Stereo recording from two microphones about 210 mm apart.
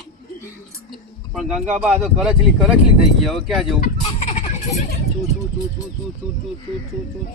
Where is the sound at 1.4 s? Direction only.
5° right (ahead or behind).